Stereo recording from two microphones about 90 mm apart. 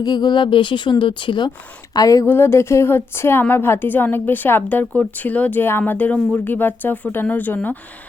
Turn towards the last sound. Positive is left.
turn(degrees=20)  # may be behind; listen again after turning